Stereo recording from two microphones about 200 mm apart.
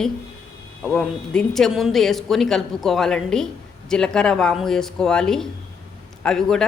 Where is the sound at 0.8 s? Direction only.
5° left (ahead or behind).